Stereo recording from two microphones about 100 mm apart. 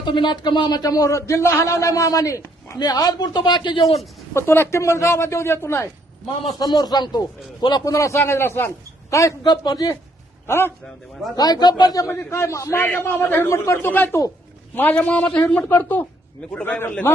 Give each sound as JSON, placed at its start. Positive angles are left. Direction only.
{"t": 0.0, "sound": "speech", "side_deg": 50}
{"t": 4.4, "sound": "a man's voice", "side_deg": 25}
{"t": 6.6, "sound": "speech", "side_deg": 45}
{"t": 9.4, "sound": "speech", "side_deg": 45}
{"t": 10.4, "sound": "a man's voice", "side_deg": 25}
{"t": 10.8, "sound": "a man's voice", "side_deg": 0}
{"t": 11.3, "sound": "a man's voice", "side_deg": 40}